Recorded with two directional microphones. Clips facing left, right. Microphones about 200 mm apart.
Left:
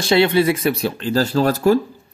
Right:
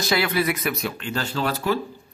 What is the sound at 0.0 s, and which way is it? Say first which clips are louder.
Speech: left 8 dB; 30° left (ahead or behind).